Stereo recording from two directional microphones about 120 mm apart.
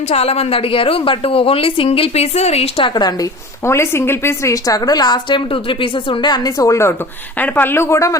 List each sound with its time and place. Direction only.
0.1 s a woman's voice: 60° left (ahead or behind)
2.9 s speech: 35° left (ahead or behind)
3.7 s a woman's voice: 20° left (ahead or behind)
7.3 s a woman's voice: 15° left (ahead or behind)